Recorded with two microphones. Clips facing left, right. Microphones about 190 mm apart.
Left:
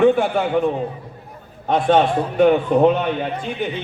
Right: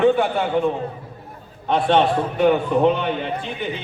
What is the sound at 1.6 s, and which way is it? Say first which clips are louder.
Speech: left 2 dB; 45° left (ahead or behind).